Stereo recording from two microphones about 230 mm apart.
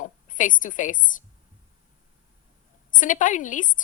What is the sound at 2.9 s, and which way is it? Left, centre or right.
Speech, left.